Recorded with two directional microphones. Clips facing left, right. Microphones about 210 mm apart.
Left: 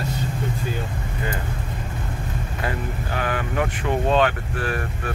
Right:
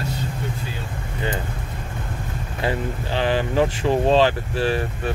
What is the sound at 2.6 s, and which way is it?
Speech, 25° right (ahead or behind).